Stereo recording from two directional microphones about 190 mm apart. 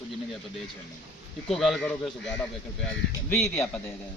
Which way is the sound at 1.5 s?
Centre (ahead or behind).